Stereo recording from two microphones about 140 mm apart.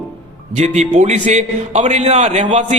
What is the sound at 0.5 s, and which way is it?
A man's voice, 55° right (ahead or behind).